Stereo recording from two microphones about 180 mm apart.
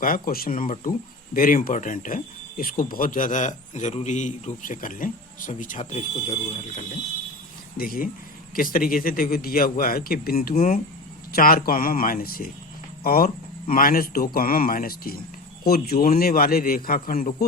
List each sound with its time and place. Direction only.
0.0 s speech: 55° left (ahead or behind); by 6.8 s 35° left (ahead or behind)
7.8 s a man's voice: 55° left (ahead or behind)